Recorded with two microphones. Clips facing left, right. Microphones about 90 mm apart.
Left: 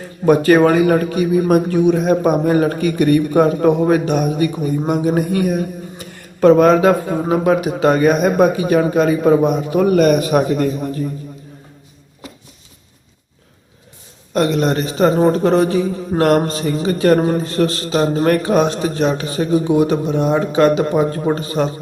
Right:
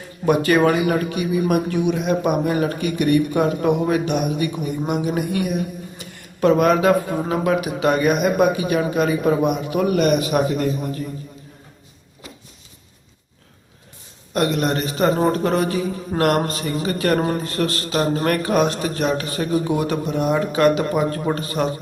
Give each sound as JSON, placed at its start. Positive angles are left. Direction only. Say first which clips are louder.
{"t": 0.3, "sound": "a man's voice", "louder": "left 5 dB", "side_deg": 35}
{"t": 14.3, "sound": "a man's voice", "louder": "left 4 dB", "side_deg": 30}